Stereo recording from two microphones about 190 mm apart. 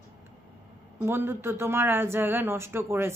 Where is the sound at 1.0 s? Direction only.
10° right (ahead or behind).